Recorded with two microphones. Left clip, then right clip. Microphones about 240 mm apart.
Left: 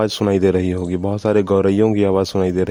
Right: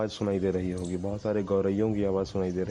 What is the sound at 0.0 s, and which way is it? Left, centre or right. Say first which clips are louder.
Speech: left 12 dB; left.